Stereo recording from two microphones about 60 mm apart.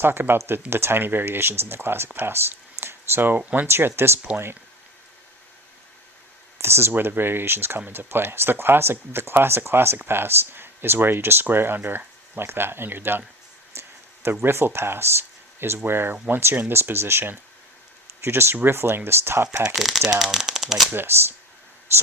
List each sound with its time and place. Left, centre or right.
0.0 s speech: right
6.6 s speech: right
13.7 s a sound: right
14.4 s speech: right
19.7 s speech: centre
20.9 s speech: right